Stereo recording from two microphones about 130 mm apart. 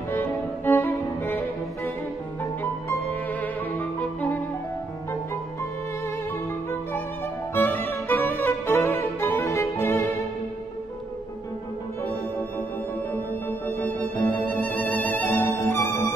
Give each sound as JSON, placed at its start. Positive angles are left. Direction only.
{"t": 0.1, "sound": "music", "side_deg": 15}
{"t": 2.4, "sound": "music", "side_deg": 15}
{"t": 7.5, "sound": "music", "side_deg": 15}
{"t": 12.0, "sound": "music", "side_deg": 15}